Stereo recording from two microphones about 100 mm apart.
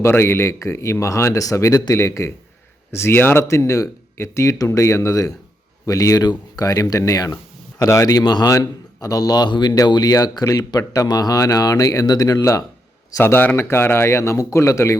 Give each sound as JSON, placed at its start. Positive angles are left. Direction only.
{"t": 0.0, "sound": "a man's voice", "side_deg": 25}